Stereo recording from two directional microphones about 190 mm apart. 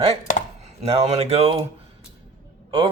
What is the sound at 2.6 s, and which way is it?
Speech, 30° right (ahead or behind).